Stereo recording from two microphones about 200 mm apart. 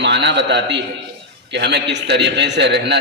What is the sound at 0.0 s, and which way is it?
A man's voice, 60° right (ahead or behind).